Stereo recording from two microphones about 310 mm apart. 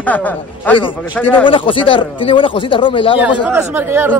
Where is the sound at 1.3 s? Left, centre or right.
Centre.